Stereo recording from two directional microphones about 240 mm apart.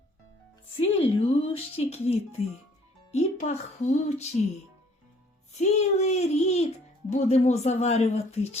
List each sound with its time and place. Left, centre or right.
0.8 s speech: left
5.5 s speech: left